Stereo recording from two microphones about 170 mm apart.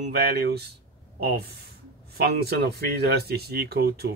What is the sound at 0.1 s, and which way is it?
Speech, 70° right (ahead or behind).